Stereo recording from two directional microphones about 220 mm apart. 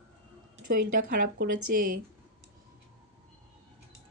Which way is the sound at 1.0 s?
40° right (ahead or behind).